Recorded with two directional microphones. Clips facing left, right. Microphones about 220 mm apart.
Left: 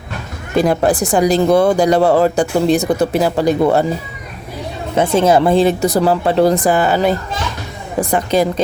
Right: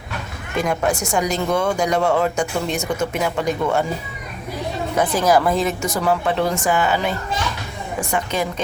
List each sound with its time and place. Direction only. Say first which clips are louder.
0.5 s speech: left 7 dB; 35° left (ahead or behind)
4.9 s speech: left 5 dB; 25° left (ahead or behind)